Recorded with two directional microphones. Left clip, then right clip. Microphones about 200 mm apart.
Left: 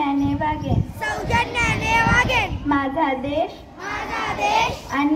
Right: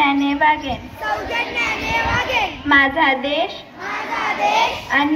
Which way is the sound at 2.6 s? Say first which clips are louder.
Right 10 dB; 45° left (ahead or behind).